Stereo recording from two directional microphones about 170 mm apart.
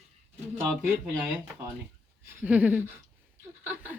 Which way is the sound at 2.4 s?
10° right (ahead or behind).